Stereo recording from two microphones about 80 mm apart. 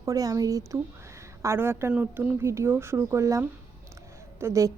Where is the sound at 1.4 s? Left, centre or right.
Right.